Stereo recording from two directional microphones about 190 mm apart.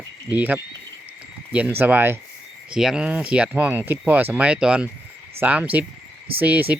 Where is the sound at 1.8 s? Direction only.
10° right (ahead or behind).